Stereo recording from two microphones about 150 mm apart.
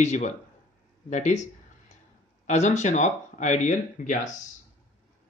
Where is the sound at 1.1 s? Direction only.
50° left (ahead or behind).